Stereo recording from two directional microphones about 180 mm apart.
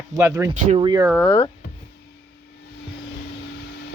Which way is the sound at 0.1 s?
15° right (ahead or behind).